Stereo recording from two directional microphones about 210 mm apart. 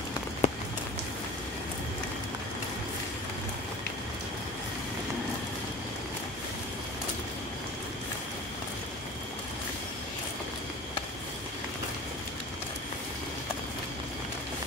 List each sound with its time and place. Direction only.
0.4 s rain on surface: 30° left (ahead or behind)